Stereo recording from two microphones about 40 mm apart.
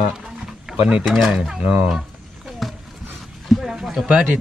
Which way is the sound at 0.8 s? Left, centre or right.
Right.